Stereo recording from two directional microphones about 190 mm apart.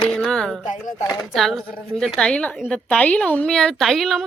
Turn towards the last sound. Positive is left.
turn(degrees=0)  # may be behind; listen again after turning